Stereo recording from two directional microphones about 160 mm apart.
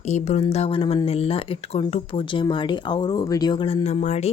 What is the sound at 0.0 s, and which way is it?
Speech, 45° left (ahead or behind).